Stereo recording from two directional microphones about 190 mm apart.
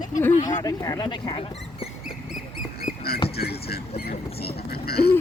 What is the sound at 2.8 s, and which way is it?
Rodents, 55° left (ahead or behind).